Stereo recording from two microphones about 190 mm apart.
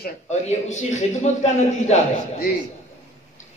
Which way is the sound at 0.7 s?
40° left (ahead or behind).